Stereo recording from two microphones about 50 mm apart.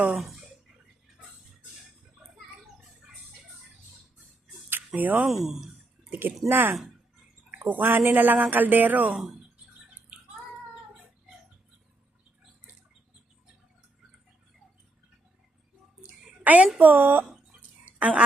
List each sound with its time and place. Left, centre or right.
0.1 s speech: centre
4.9 s speech: right
5.2 s speech: centre
6.1 s speech: right
16.0 s a sound: right
16.7 s speech: right
17.8 s fowl: right